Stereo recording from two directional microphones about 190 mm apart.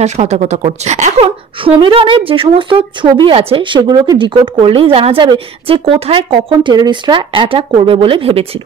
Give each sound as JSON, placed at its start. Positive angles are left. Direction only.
{"t": 0.0, "sound": "a woman's voice", "side_deg": -35}